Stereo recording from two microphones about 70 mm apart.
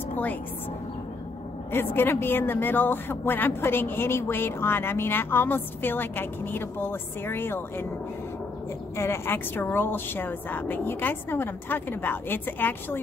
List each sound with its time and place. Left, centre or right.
0.1 s a woman's voice: left
1.7 s a woman's voice: left
8.9 s a woman's voice: left